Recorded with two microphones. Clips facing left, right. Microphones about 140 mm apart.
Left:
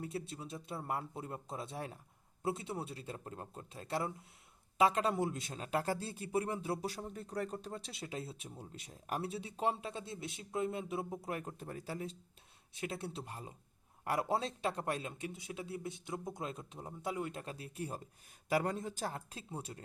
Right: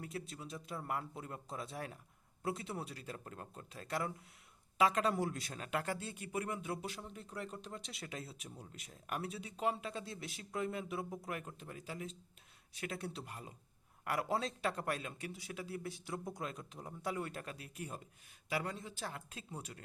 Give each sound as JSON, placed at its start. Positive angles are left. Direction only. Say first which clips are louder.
{"t": 0.0, "sound": "speech", "louder": "left 3 dB", "side_deg": 30}
{"t": 18.4, "sound": "speech", "louder": "left 6 dB", "side_deg": 45}